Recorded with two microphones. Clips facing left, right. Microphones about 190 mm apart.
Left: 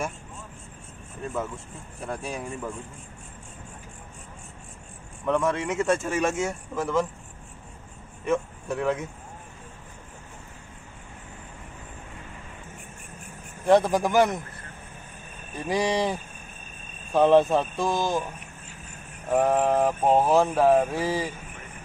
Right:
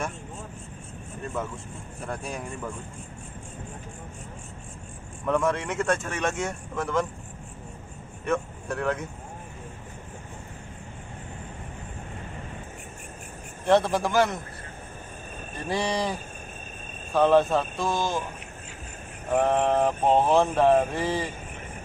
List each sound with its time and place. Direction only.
2.0 s mantra: centre (ahead or behind)
5.2 s mantra: centre (ahead or behind)
8.3 s speech: centre (ahead or behind)
13.7 s speech: 15° left (ahead or behind)
15.6 s speech: 15° left (ahead or behind)
19.3 s mantra: 5° left (ahead or behind)